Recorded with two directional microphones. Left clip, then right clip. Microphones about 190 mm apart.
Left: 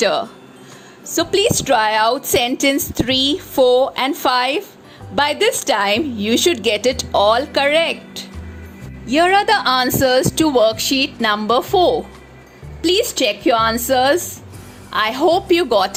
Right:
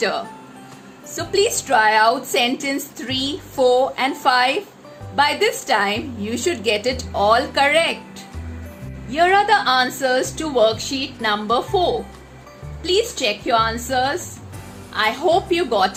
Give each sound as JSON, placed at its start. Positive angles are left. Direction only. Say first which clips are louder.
{"t": 1.1, "sound": "a woman's voice", "louder": "left 3 dB", "side_deg": 50}